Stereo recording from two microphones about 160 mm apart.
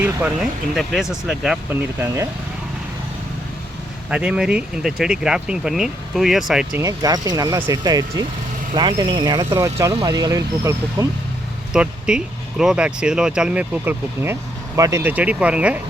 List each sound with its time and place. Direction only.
0.0 s speech: 5° right (ahead or behind)
1.7 s speech: 15° right (ahead or behind)
4.1 s speech: 5° right (ahead or behind)
6.7 s speech: 20° right (ahead or behind)
11.7 s speech: 5° right (ahead or behind)